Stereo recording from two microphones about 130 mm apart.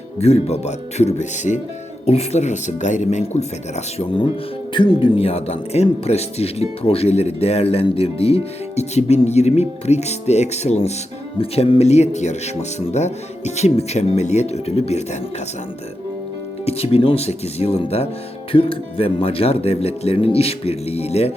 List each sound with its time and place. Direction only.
0.2 s speech: 55° left (ahead or behind)
2.0 s speech: 55° left (ahead or behind)
16.6 s speech: 50° left (ahead or behind)